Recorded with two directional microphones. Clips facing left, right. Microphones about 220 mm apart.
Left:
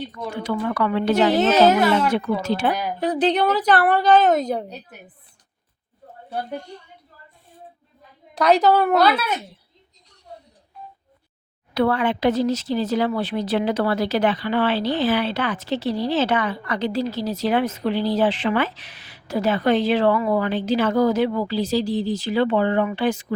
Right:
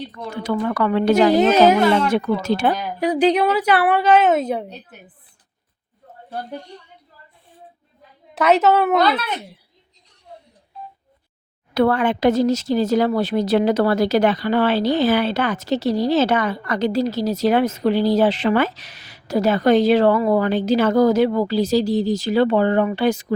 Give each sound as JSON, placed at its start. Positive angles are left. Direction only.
{"t": 0.4, "sound": "speech", "side_deg": -45}
{"t": 1.3, "sound": "a woman's voice", "side_deg": -10}
{"t": 2.2, "sound": "speech", "side_deg": -45}
{"t": 3.0, "sound": "a woman's voice", "side_deg": -10}
{"t": 8.4, "sound": "a woman's voice", "side_deg": -5}
{"t": 9.0, "sound": "speech", "side_deg": 10}
{"t": 11.7, "sound": "speech", "side_deg": -45}